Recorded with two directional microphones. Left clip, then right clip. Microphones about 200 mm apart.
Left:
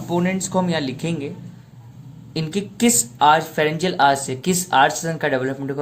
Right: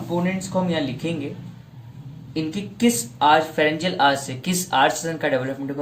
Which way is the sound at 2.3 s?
45° left (ahead or behind).